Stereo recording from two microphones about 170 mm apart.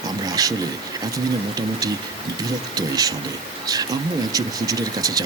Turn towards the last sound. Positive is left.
turn(degrees=-20)  # may be behind; listen again after turning